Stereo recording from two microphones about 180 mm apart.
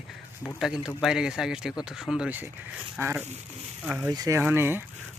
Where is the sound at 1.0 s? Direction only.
5° right (ahead or behind).